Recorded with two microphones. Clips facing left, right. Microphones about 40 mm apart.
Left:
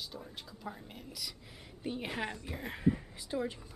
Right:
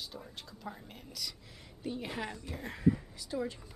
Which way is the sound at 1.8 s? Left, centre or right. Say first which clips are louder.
Left 1 dB; left.